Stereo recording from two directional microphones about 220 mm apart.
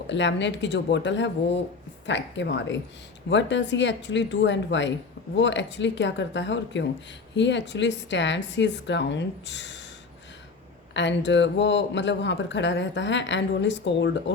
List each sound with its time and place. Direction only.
0.1 s speech: 55° left (ahead or behind)
10.9 s speech: 55° left (ahead or behind)